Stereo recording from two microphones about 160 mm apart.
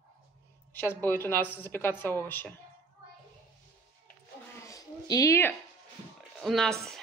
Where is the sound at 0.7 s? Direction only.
15° left (ahead or behind).